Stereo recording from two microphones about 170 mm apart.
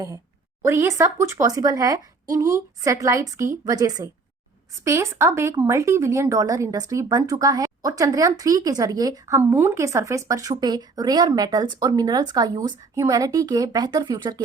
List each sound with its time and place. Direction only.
0.6 s speech: 15° right (ahead or behind)